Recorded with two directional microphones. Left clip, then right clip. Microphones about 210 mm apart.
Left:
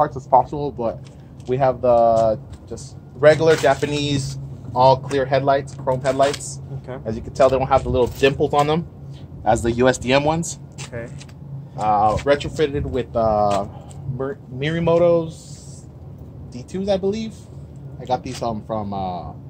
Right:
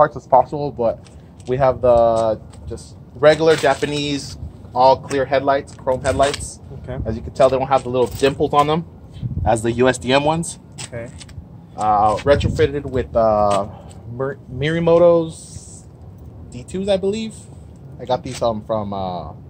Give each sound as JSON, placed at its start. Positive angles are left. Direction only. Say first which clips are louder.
{"t": 0.0, "sound": "speech", "louder": "right 3 dB", "side_deg": -35}
{"t": 11.7, "sound": "speech", "louder": "right 2 dB", "side_deg": -25}
{"t": 16.5, "sound": "speech", "louder": "right 2 dB", "side_deg": -25}